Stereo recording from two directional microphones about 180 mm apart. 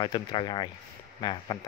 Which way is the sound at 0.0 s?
25° left (ahead or behind).